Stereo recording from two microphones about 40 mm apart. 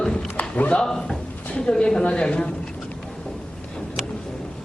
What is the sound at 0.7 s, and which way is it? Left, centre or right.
A man's voice, centre.